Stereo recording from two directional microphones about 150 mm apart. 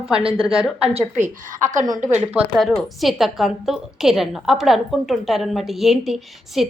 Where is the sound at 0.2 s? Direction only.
35° right (ahead or behind).